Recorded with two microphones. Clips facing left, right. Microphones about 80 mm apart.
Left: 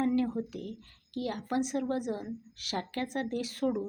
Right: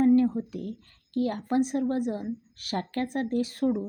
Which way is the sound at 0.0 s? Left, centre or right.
Right.